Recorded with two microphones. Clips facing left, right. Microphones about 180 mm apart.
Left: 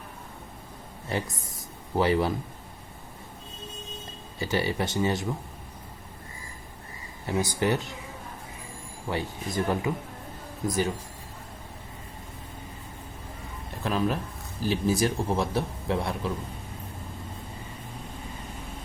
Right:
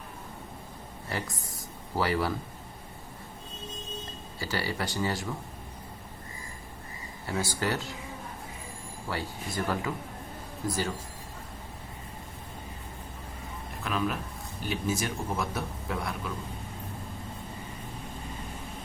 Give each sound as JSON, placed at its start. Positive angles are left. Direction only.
{"t": 1.3, "sound": "speech", "side_deg": 0}
{"t": 2.0, "sound": "speech", "side_deg": 20}
{"t": 4.4, "sound": "speech", "side_deg": 20}
{"t": 7.3, "sound": "speech", "side_deg": 20}
{"t": 9.0, "sound": "speech", "side_deg": 20}
{"t": 13.8, "sound": "speech", "side_deg": 35}